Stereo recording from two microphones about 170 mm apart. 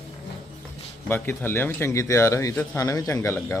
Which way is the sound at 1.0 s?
15° left (ahead or behind).